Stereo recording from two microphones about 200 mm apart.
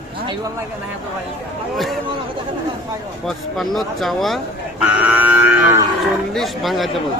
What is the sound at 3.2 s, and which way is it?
Speech, centre (ahead or behind).